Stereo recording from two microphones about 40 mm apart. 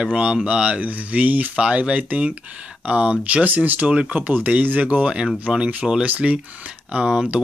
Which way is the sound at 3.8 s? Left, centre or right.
Right.